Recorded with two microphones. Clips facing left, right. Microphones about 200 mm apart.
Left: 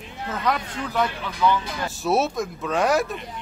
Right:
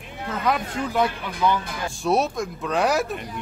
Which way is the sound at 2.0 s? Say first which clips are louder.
Even; centre (ahead or behind).